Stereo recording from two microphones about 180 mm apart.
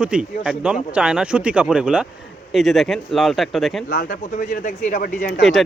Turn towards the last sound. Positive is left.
turn(degrees=0)  # may be behind; listen again after turning